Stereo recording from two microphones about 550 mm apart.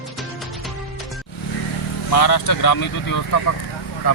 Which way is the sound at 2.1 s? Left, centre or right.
Left.